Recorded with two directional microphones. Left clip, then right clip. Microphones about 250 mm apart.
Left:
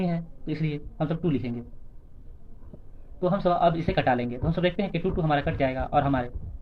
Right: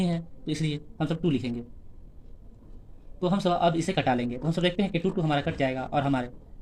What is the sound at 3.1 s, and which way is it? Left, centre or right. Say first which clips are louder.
Speech: left 2 dB; right.